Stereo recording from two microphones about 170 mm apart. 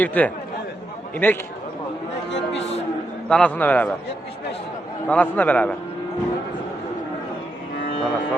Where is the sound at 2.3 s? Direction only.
90° left.